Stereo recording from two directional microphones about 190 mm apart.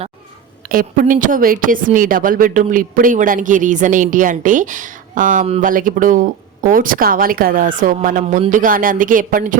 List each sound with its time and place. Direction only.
0.7 s a woman's voice: 45° right (ahead or behind)